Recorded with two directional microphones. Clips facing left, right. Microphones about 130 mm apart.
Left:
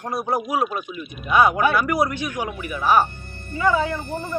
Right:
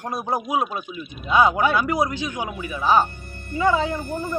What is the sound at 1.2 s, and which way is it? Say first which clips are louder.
Speech: even; 20° right (ahead or behind).